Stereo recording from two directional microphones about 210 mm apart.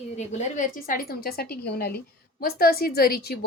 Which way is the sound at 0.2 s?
35° left (ahead or behind).